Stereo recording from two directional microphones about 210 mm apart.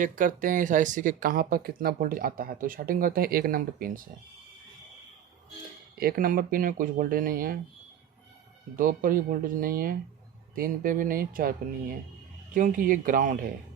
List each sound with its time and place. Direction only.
0.0 s speech: 40° right (ahead or behind)
6.0 s speech: 45° right (ahead or behind)
8.7 s speech: 40° right (ahead or behind)